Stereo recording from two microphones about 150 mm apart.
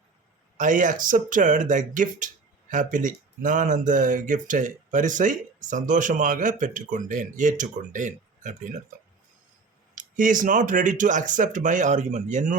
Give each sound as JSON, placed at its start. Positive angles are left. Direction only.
{"t": 0.5, "sound": "speech", "side_deg": -60}
{"t": 9.9, "sound": "speech", "side_deg": -60}